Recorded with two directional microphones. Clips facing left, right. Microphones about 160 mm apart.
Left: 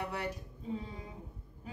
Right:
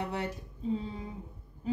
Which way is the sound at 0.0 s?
25° right (ahead or behind).